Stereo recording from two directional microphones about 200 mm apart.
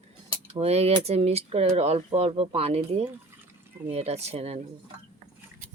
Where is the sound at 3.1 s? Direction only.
10° right (ahead or behind).